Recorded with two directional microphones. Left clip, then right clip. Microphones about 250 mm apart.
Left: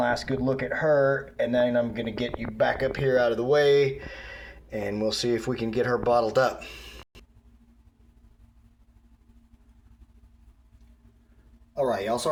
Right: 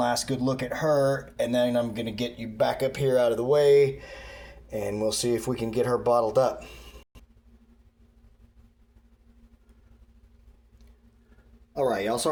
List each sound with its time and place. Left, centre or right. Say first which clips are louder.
0.0 s speech: left 1 dB; centre
11.7 s speech: even; right